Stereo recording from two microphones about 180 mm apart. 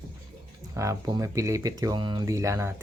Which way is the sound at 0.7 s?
15° right (ahead or behind).